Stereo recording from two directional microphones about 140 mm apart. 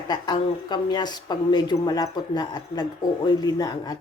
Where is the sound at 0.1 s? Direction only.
30° left (ahead or behind).